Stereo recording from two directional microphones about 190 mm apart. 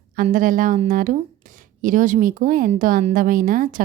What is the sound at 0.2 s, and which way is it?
A woman's voice, 45° right (ahead or behind).